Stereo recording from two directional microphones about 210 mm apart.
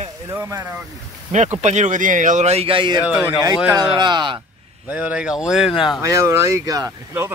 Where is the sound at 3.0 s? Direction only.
5° right (ahead or behind).